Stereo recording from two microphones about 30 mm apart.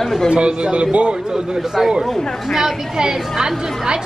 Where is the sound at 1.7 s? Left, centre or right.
Centre.